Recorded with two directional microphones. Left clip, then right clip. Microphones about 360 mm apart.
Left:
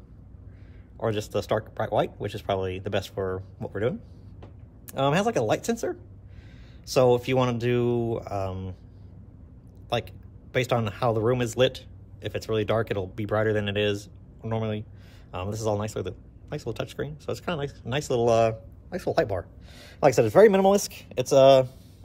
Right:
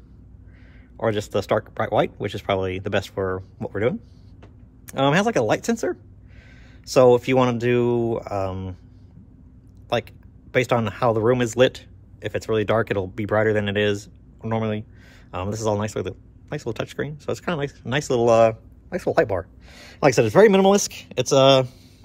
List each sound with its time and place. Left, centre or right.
0.9 s speech: right
9.8 s speech: centre